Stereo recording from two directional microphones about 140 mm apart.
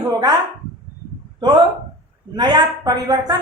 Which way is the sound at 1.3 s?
35° right (ahead or behind).